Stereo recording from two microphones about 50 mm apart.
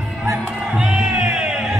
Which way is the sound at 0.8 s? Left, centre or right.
Centre.